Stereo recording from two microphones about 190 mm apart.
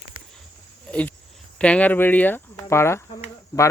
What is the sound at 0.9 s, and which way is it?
Speech, 5° left (ahead or behind).